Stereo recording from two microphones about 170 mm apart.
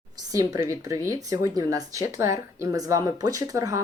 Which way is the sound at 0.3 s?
20° right (ahead or behind).